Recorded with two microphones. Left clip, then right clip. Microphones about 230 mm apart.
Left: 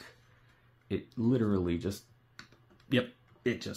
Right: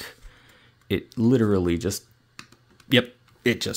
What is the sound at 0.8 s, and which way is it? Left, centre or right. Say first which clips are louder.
Speech: right 9 dB; right.